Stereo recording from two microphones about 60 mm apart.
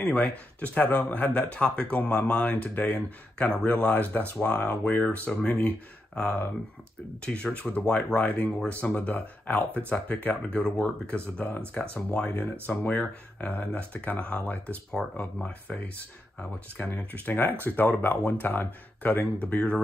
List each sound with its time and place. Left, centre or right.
0.2 s speech: left
16.9 s speech: left